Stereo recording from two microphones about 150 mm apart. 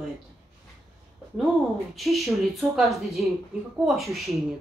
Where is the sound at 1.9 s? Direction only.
Centre (ahead or behind).